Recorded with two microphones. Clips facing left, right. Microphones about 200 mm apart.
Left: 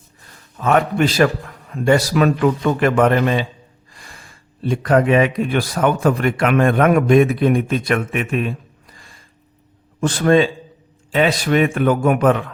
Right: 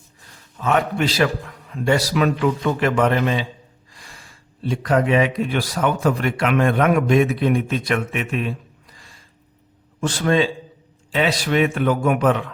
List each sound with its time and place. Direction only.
0.6 s speech: 50° left (ahead or behind)
9.0 s a sound: 50° left (ahead or behind)
10.0 s speech: 55° left (ahead or behind)